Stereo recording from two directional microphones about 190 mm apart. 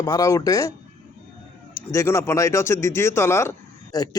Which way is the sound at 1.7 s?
15° left (ahead or behind).